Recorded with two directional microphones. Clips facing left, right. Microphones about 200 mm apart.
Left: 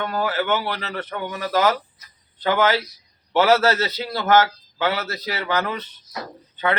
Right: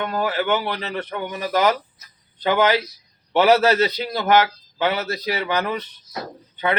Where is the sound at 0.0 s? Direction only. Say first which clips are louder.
Right 1 dB; 15° right (ahead or behind).